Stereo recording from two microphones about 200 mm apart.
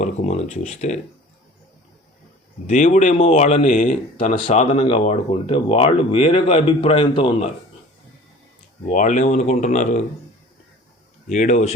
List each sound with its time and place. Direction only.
0.0 s speech: 35° left (ahead or behind)
2.6 s speech: 35° left (ahead or behind)
8.9 s speech: 40° left (ahead or behind)
11.3 s speech: 40° left (ahead or behind)